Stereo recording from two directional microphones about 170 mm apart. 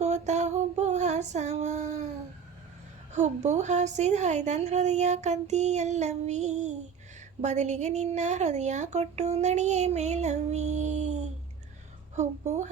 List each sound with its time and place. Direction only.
0.0 s female singing: 40° right (ahead or behind)
3.1 s a woman's voice: 45° right (ahead or behind)